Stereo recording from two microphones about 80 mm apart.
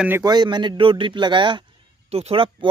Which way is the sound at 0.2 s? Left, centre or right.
Right.